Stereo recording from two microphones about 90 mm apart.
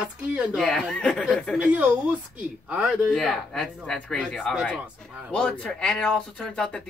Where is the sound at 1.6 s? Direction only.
15° right (ahead or behind).